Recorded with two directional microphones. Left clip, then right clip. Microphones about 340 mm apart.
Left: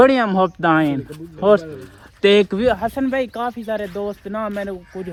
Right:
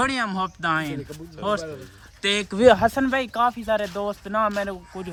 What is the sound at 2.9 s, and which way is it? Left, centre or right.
Speech, centre.